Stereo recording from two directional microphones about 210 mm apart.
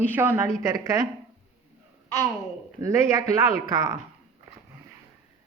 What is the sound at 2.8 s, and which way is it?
Speech, 15° right (ahead or behind).